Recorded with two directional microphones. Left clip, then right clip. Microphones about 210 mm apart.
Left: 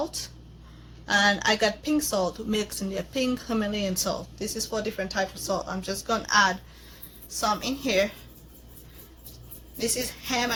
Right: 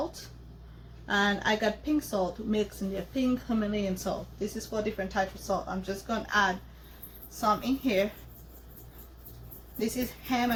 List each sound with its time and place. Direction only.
1.0 s speech: 60° left (ahead or behind)
10.2 s speech: 60° left (ahead or behind)